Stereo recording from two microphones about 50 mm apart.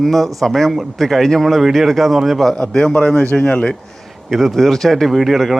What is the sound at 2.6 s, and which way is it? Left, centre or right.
Speech, centre.